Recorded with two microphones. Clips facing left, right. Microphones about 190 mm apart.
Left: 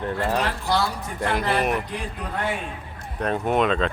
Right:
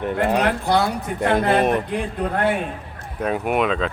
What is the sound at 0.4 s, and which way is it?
A man's voice, 55° right (ahead or behind).